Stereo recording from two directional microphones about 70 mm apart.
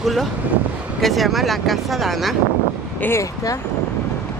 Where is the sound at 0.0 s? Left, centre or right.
Centre.